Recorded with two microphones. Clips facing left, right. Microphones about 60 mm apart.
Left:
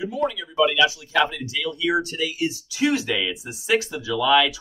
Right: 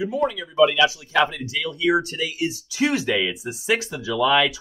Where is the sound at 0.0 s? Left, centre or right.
Right.